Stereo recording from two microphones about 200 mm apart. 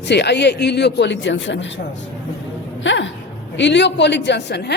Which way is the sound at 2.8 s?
65° left (ahead or behind).